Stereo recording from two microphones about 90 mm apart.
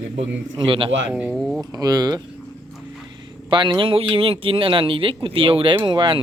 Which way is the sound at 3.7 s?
85° right.